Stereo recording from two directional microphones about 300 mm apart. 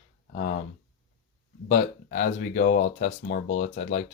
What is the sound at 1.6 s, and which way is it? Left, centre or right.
Speech, left.